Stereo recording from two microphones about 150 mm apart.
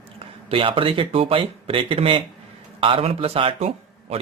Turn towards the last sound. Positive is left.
turn(degrees=-45)  # may be behind; listen again after turning